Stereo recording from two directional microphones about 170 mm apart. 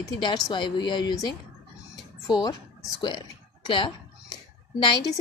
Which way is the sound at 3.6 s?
30° left (ahead or behind).